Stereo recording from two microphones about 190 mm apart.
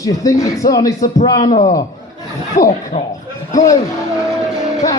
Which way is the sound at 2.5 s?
45° left (ahead or behind).